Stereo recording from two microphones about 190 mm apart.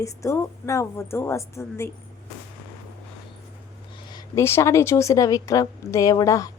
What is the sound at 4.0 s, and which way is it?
A woman's voice, 20° left (ahead or behind).